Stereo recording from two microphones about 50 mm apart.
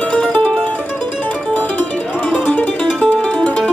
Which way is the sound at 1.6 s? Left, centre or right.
Left.